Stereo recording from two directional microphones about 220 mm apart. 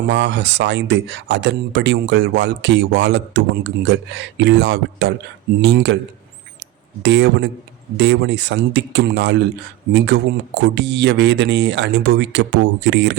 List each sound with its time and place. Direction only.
0.1 s speech: 50° right (ahead or behind)
7.0 s speech: 55° right (ahead or behind)